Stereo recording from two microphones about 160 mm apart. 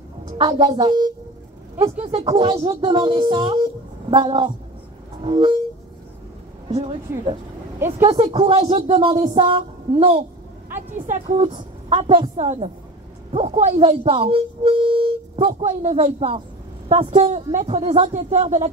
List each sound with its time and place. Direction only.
0.4 s speech: 30° right (ahead or behind)
1.8 s speech: 45° right (ahead or behind)
2.1 s speech: 30° right (ahead or behind)
6.7 s speech: 35° right (ahead or behind)